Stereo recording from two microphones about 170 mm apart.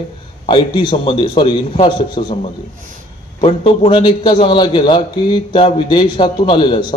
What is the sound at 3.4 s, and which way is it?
A man's voice, 35° left (ahead or behind).